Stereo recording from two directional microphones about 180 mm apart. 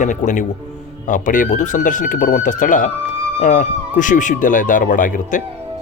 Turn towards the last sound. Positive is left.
turn(degrees=45)  # may be behind; listen again after turning